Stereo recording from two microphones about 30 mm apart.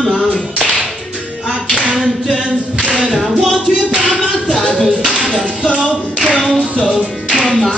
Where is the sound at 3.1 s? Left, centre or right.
Centre.